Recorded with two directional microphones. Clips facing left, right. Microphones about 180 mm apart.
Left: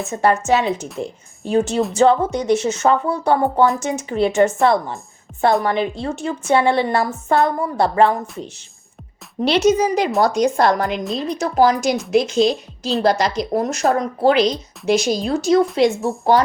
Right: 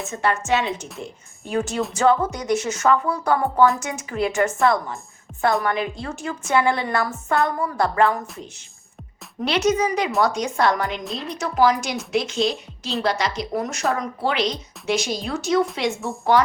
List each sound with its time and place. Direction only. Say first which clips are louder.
0.1 s a woman's voice: left 5 dB; 35° left (ahead or behind)
5.3 s music: left 5 dB; centre (ahead or behind)
5.6 s a woman's voice: left 4 dB; 30° left (ahead or behind)